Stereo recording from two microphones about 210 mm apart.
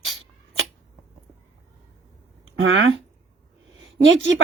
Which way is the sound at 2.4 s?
70° right (ahead or behind).